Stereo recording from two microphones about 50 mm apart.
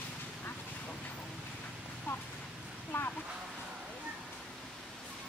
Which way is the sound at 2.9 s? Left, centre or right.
Left.